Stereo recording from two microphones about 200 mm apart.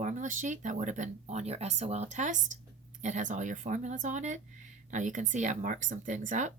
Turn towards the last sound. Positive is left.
turn(degrees=-40)  # may be behind; listen again after turning